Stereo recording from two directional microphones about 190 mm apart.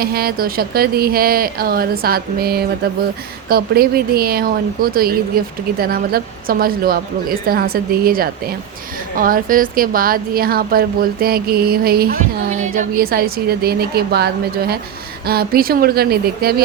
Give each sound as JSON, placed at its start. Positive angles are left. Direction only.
{"t": 0.0, "sound": "a woman's voice", "side_deg": -55}